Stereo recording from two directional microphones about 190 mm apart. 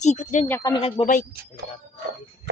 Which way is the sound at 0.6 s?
25° left (ahead or behind).